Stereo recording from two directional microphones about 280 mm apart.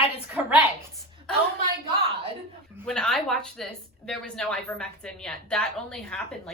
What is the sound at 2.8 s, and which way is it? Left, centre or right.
A woman's voice, centre.